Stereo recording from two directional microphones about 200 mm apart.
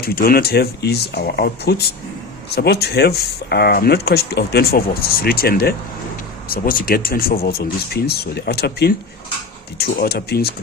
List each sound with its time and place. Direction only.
0.0 s speech: 50° left (ahead or behind)